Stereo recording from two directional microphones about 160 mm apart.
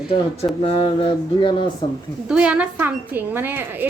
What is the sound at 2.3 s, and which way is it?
A woman's voice, 5° right (ahead or behind).